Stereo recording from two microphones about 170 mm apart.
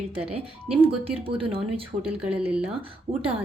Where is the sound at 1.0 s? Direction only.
30° right (ahead or behind).